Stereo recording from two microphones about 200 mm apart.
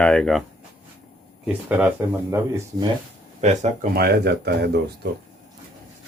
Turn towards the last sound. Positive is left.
turn(degrees=-55)  # may be behind; listen again after turning